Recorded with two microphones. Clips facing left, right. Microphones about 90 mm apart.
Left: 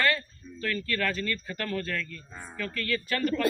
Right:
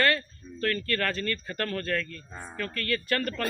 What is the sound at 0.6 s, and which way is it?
Speech, 50° right (ahead or behind).